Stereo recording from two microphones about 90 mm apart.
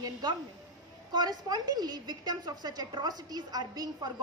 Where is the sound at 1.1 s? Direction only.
50° right (ahead or behind).